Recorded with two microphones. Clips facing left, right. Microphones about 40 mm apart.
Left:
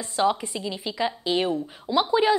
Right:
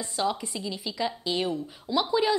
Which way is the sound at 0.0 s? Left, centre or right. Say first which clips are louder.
Left 5 dB; left.